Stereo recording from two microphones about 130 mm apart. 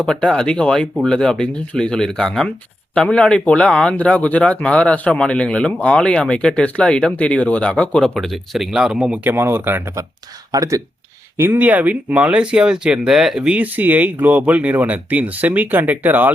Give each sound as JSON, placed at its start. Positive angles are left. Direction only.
{"t": 0.0, "sound": "speech", "side_deg": 5}
{"t": 11.3, "sound": "speech", "side_deg": -15}